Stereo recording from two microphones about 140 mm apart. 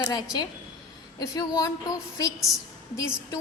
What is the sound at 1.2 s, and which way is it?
A woman's voice, 25° left (ahead or behind).